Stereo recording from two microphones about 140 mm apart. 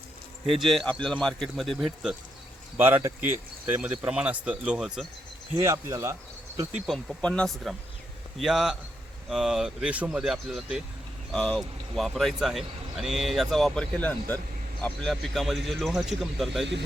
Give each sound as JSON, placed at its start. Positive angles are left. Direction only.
{"t": 0.4, "sound": "speech", "side_deg": 0}
{"t": 2.7, "sound": "speech", "side_deg": -15}
{"t": 5.6, "sound": "speech", "side_deg": -20}
{"t": 6.8, "sound": "speech", "side_deg": 0}